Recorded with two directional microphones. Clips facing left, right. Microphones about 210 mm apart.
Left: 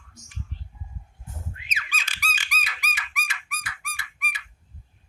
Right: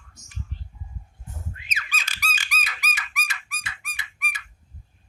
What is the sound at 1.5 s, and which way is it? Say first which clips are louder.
Squeak: right 1 dB; 40° right (ahead or behind).